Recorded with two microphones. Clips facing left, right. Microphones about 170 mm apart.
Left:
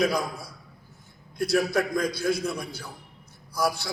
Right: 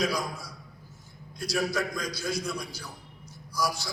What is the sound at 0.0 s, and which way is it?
Speech, 55° left (ahead or behind).